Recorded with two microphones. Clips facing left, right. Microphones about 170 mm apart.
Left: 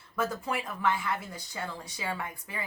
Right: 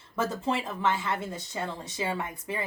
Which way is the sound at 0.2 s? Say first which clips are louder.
Right 3 dB; 25° right (ahead or behind).